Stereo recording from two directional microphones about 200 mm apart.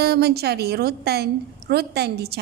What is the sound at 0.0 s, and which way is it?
A woman's voice, 55° right (ahead or behind).